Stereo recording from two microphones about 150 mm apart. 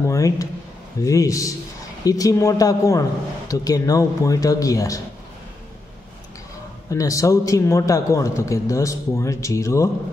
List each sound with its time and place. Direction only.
0.0 s a man's voice: 20° left (ahead or behind)
6.9 s a man's voice: 20° left (ahead or behind)